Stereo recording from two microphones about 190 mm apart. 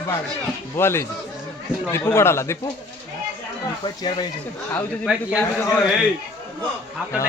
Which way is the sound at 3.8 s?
25° left (ahead or behind).